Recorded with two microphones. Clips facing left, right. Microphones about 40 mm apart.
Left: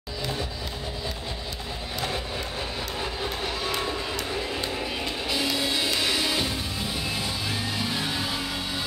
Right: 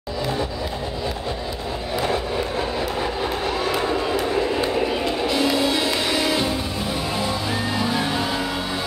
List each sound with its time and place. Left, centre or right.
3.4 s crowd: right
4.8 s music: centre
7.7 s music: centre